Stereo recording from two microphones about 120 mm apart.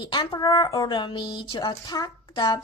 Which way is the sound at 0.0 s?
40° left (ahead or behind).